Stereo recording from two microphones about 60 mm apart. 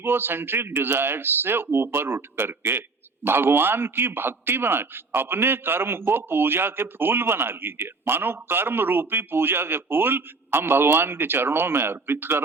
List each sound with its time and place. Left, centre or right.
0.0 s a man's voice: right